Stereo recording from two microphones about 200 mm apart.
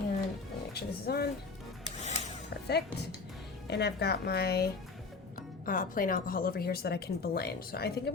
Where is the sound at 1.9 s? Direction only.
35° left (ahead or behind).